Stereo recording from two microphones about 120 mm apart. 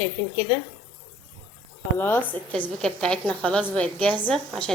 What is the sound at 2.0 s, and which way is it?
Speech, 20° left (ahead or behind).